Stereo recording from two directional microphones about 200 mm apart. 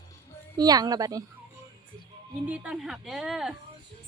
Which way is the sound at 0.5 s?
20° right (ahead or behind).